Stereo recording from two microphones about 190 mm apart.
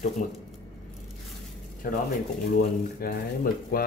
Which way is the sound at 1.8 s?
50° left (ahead or behind).